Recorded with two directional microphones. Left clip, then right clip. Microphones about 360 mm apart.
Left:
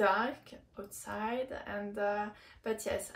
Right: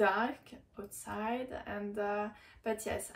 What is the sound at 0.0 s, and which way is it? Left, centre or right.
Speech, centre.